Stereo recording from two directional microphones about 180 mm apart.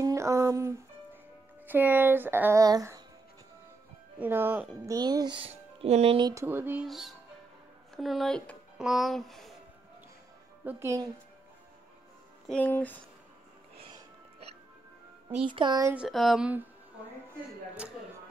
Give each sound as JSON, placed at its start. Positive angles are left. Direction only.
{"t": 0.0, "sound": "a sound", "side_deg": -15}
{"t": 1.7, "sound": "speech", "side_deg": -10}
{"t": 4.2, "sound": "speech", "side_deg": -10}
{"t": 5.8, "sound": "speech", "side_deg": -35}
{"t": 6.4, "sound": "speech", "side_deg": -10}
{"t": 10.6, "sound": "speech", "side_deg": -10}
{"t": 12.4, "sound": "speech", "side_deg": 10}
{"t": 15.2, "sound": "speech", "side_deg": -25}
{"t": 15.9, "sound": "speech", "side_deg": -5}